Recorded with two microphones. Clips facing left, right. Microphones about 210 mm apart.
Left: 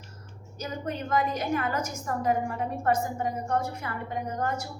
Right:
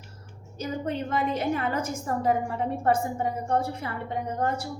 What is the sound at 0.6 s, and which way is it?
A woman's voice, 30° right (ahead or behind).